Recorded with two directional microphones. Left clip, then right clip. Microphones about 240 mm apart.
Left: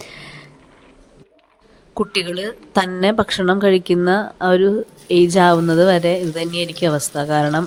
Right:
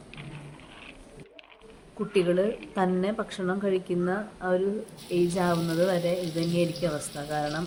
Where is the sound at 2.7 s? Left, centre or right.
Left.